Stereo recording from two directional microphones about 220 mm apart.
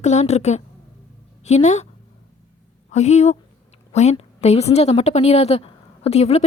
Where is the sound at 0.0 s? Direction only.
30° left (ahead or behind).